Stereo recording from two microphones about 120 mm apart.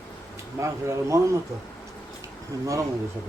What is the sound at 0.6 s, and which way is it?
Speech, 25° right (ahead or behind).